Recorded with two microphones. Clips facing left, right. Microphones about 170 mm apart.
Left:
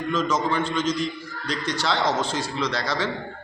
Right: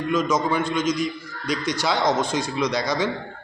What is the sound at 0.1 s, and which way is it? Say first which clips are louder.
A man's voice: right 2 dB; 10° right (ahead or behind).